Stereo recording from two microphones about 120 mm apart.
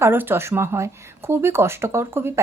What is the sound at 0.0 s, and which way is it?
Speech, 15° right (ahead or behind).